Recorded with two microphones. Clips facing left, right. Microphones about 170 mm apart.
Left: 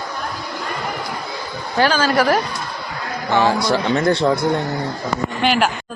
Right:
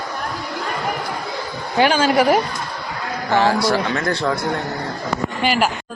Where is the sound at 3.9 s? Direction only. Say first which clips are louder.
Left 5 dB; 25° left (ahead or behind).